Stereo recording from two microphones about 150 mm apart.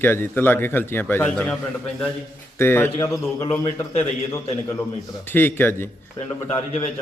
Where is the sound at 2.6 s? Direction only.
15° left (ahead or behind).